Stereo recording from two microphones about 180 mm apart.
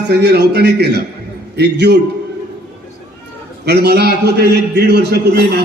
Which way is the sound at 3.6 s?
65° right (ahead or behind).